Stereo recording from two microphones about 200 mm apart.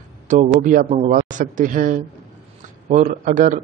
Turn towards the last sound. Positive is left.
turn(degrees=-40)  # may be behind; listen again after turning